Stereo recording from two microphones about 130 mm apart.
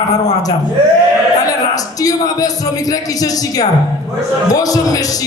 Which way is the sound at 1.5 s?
30° left (ahead or behind).